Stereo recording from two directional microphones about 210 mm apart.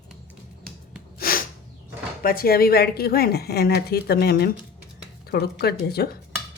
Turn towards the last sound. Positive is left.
turn(degrees=50)  # may be behind; listen again after turning